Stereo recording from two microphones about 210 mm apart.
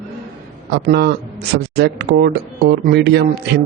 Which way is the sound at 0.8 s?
50° right (ahead or behind).